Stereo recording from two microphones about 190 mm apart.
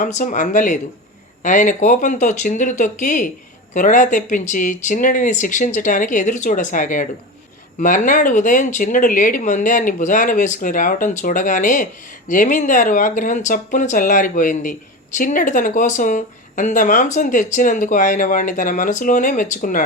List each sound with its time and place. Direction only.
0.0 s speech: 40° left (ahead or behind)